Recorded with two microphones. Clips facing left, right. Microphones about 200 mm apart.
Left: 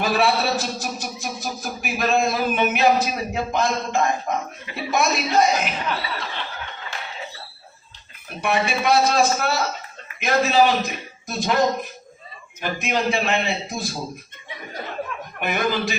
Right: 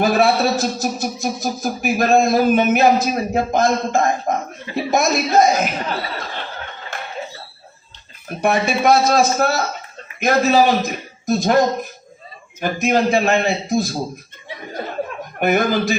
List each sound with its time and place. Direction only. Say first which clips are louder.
0.0 s a man's voice: right 5 dB; 45° right (ahead or behind)
6.9 s a sound: right 5 dB; 50° right (ahead or behind)
8.4 s a man's voice: right 5 dB; 45° right (ahead or behind)
15.4 s a man's voice: right 6 dB; 45° right (ahead or behind)